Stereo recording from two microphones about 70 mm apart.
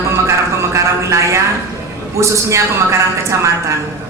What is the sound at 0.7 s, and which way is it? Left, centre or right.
Speech, right.